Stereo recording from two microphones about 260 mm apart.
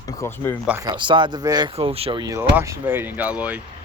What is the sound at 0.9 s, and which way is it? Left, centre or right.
Speech, centre.